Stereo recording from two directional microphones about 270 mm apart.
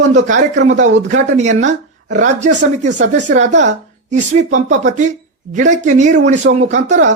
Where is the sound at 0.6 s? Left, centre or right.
Right.